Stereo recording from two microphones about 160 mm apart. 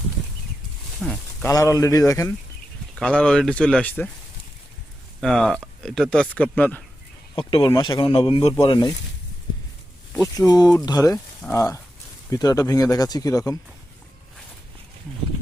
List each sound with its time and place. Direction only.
1.0 s speech: centre (ahead or behind)
1.5 s speech: 20° left (ahead or behind)
3.0 s speech: 5° left (ahead or behind)
5.2 s speech: 5° left (ahead or behind)
7.3 s speech: 35° left (ahead or behind)
10.3 s speech: 25° left (ahead or behind)